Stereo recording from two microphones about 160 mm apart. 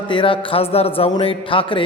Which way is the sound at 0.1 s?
30° left (ahead or behind).